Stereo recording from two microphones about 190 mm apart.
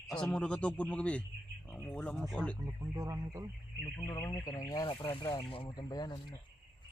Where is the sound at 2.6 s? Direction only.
20° right (ahead or behind).